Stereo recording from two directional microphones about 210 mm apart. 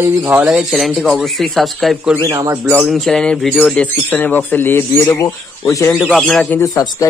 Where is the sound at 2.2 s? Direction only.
20° right (ahead or behind).